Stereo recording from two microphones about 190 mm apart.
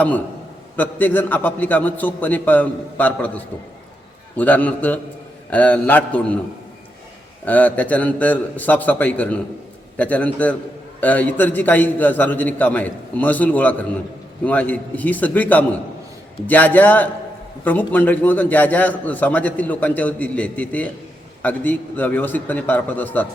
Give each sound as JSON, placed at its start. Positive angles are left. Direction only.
{"t": 0.8, "sound": "a man's voice", "side_deg": 10}
{"t": 7.4, "sound": "a man's voice", "side_deg": 10}